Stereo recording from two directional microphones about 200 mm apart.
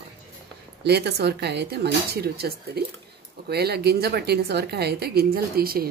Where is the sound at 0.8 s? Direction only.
55° right (ahead or behind).